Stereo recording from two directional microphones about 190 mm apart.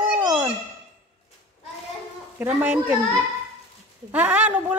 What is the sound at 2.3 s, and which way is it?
Speech, 10° right (ahead or behind).